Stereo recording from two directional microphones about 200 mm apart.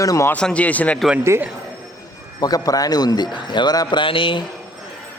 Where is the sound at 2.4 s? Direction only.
20° left (ahead or behind).